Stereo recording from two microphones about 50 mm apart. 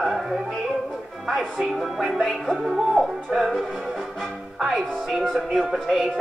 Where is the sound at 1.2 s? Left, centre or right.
Centre.